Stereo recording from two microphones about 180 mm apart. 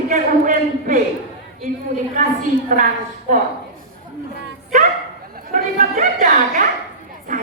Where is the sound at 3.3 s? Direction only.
50° right (ahead or behind).